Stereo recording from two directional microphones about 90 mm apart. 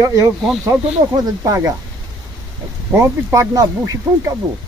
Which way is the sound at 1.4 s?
35° right (ahead or behind).